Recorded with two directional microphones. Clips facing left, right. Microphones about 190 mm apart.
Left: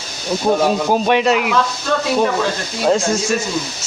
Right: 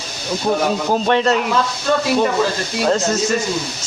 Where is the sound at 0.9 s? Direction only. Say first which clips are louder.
Right 1 dB; 15° left (ahead or behind).